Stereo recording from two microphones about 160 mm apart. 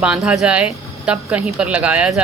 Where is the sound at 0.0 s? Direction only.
5° right (ahead or behind).